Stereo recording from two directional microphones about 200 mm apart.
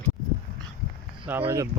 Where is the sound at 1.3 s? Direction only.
10° right (ahead or behind).